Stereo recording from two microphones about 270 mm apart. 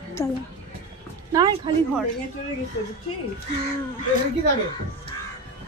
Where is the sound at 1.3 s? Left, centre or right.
Centre.